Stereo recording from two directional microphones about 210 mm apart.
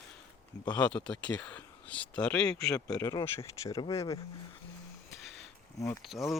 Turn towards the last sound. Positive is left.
turn(degrees=0)  # may be behind; listen again after turning